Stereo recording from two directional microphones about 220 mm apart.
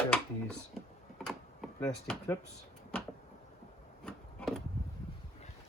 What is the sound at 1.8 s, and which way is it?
Speech, 15° left (ahead or behind).